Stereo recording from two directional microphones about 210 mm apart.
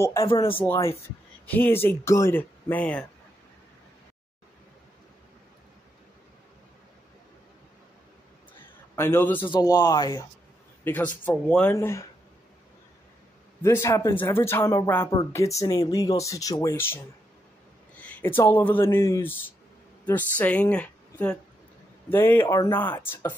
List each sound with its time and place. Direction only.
0.0 s speech: 15° left (ahead or behind)
0.3 s speech: 25° left (ahead or behind)
0.6 s speech: 10° left (ahead or behind)
8.9 s speech: 10° left (ahead or behind)
10.8 s a man's voice: 10° left (ahead or behind)
13.6 s a woman's voice: 15° left (ahead or behind)